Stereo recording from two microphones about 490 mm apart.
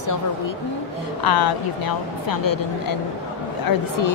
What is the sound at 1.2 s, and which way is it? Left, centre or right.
A woman's voice, left.